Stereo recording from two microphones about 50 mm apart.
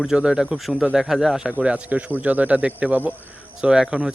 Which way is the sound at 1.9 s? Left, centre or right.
Right.